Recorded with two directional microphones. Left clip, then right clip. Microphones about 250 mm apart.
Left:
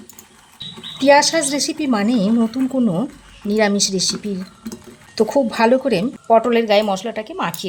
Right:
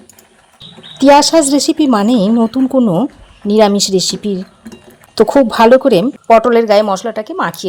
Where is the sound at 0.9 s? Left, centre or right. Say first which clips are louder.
Right 6 dB; right.